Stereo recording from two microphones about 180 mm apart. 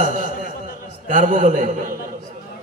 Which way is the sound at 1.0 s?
45° right (ahead or behind).